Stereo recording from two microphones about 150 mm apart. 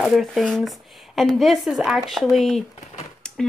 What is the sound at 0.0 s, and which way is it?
Speech, centre (ahead or behind).